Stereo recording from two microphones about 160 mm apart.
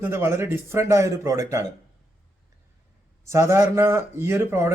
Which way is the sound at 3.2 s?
20° right (ahead or behind).